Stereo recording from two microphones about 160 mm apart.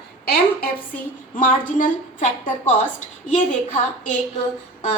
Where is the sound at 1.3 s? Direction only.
55° left (ahead or behind).